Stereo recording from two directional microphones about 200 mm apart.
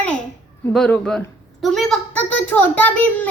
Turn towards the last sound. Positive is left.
turn(degrees=10)  # may be behind; listen again after turning